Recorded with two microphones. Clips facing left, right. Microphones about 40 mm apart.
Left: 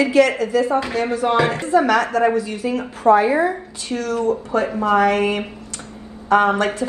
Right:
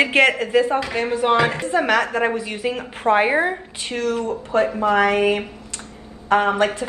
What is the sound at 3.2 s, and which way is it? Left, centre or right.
A woman's voice, right.